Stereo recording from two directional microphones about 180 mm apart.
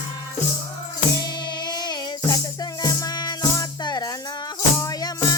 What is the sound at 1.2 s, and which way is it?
Music, 25° left (ahead or behind).